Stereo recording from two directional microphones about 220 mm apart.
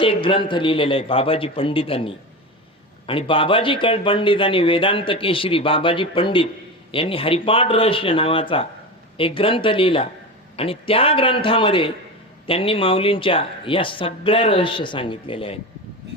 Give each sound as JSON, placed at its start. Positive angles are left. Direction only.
{"t": 0.0, "sound": "speech", "side_deg": 25}